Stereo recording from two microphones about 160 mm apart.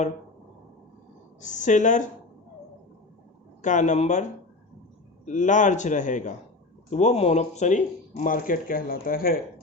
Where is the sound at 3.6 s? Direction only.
50° left (ahead or behind); by 9.4 s 65° left (ahead or behind).